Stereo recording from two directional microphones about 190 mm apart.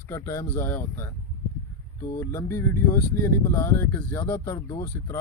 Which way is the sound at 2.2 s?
15° left (ahead or behind).